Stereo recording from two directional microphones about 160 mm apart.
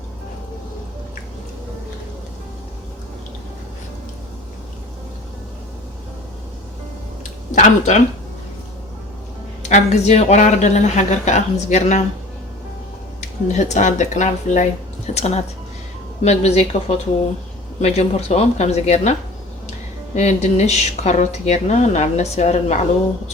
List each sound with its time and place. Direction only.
7.5 s speech: 50° left (ahead or behind)
9.6 s speech: 45° left (ahead or behind)
13.5 s speech: 50° left (ahead or behind)
20.1 s speech: 45° left (ahead or behind)